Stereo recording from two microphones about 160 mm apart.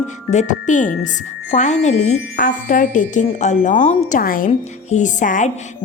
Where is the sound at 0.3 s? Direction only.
50° left (ahead or behind).